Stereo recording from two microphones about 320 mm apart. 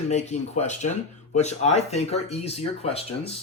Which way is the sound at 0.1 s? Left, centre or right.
Left.